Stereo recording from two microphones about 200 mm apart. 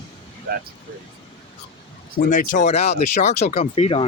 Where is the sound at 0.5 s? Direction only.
50° right (ahead or behind).